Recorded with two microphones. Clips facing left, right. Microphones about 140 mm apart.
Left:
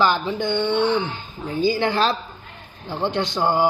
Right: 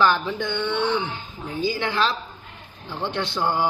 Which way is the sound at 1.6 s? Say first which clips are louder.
Left 4 dB; 35° left (ahead or behind).